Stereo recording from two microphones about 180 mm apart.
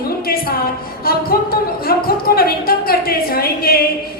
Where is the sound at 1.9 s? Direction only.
55° left (ahead or behind).